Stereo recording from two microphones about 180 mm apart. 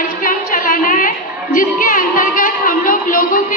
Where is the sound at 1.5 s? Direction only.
50° left (ahead or behind).